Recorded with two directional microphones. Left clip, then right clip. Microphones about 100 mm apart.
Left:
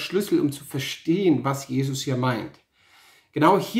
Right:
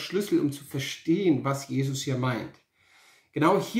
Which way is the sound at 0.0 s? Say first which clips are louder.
Left 3 dB; 35° left (ahead or behind).